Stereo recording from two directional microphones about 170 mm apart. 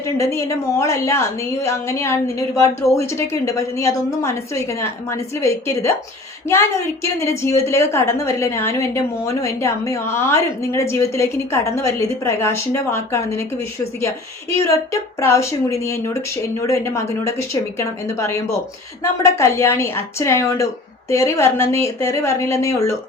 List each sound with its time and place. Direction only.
0.0 s a woman's voice: 15° left (ahead or behind)
14.6 s a woman's voice: 15° left (ahead or behind)